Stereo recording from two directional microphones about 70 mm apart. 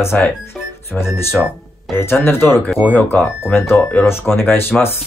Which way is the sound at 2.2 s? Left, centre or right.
Left.